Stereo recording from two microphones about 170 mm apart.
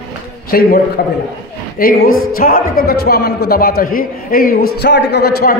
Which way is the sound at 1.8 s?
60° left (ahead or behind).